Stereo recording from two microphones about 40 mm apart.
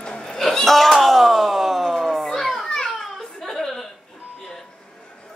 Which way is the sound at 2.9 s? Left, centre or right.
Centre.